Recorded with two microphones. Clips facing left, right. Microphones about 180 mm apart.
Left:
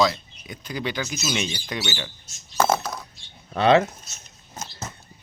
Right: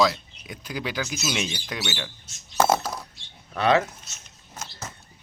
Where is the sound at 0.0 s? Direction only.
Centre (ahead or behind).